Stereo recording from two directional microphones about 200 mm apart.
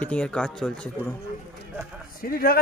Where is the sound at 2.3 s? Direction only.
45° left (ahead or behind).